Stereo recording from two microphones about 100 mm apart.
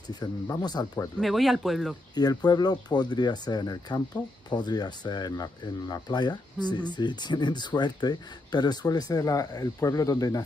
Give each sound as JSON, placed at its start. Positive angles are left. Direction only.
{"t": 0.1, "sound": "speech", "side_deg": 45}
{"t": 1.2, "sound": "speech", "side_deg": 0}
{"t": 2.1, "sound": "speech", "side_deg": 45}